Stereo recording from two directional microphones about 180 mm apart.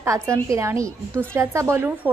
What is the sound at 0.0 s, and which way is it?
A woman's voice, 15° right (ahead or behind).